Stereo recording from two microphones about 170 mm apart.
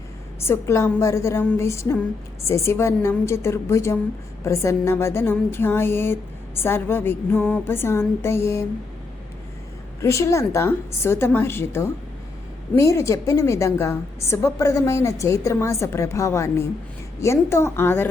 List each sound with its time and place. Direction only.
0.3 s a woman's voice: 15° left (ahead or behind)
10.0 s a woman's voice: 15° left (ahead or behind)